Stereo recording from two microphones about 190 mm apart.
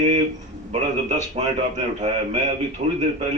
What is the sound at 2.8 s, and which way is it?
Speech, 40° right (ahead or behind).